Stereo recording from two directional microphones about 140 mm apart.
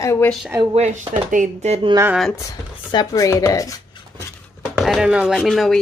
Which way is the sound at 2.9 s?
30° left (ahead or behind).